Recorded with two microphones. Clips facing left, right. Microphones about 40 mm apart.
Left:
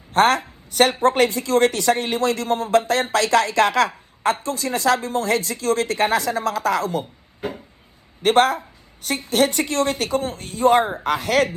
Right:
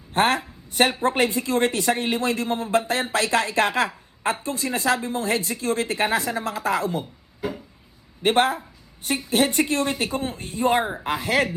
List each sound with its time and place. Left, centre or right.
0.2 s a woman's voice: left
8.2 s a woman's voice: left
10.2 s speech: right
10.4 s a woman's voice: left